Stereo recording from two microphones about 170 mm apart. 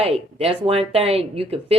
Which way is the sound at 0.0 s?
35° right (ahead or behind).